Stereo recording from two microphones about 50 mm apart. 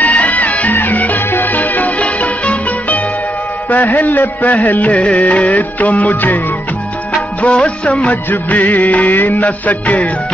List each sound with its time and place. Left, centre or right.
0.0 s music: left
7.4 s music of bollywood: left
8.3 s music: left
9.0 s music: left
9.3 s music: left